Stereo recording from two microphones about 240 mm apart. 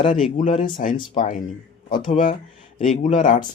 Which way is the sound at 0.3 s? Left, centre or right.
Left.